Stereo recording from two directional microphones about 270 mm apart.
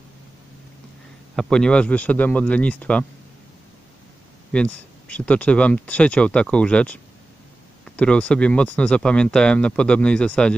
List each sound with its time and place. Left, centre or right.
1.3 s speech: centre
4.5 s speech: centre